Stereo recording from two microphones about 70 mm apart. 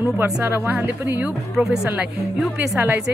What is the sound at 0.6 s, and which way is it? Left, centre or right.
Speech, right.